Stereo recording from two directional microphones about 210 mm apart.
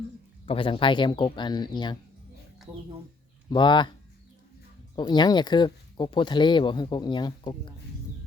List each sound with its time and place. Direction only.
0.4 s speech: 25° left (ahead or behind)
3.5 s speech: 20° left (ahead or behind)
4.9 s speech: 20° left (ahead or behind)